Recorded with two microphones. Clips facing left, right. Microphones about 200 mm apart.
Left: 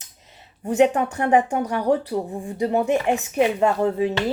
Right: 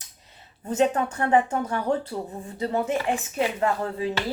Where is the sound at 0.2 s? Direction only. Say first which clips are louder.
Left 8 dB; 20° left (ahead or behind).